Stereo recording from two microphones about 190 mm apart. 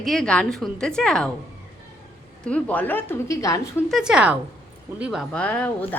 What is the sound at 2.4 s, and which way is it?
A woman's voice, 5° left (ahead or behind).